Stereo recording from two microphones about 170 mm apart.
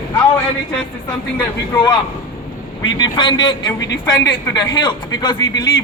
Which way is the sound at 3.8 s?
90° left.